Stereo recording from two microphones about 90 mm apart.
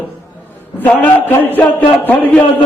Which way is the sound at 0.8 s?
20° left (ahead or behind).